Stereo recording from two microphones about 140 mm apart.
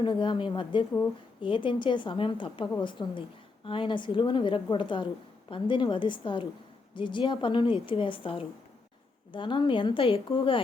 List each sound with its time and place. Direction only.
0.0 s a woman's voice: 35° left (ahead or behind)